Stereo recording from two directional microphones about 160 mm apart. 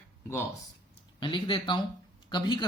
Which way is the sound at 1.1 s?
30° left (ahead or behind).